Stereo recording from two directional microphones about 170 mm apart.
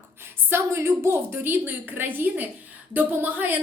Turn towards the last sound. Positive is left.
turn(degrees=-10)  # may be behind; listen again after turning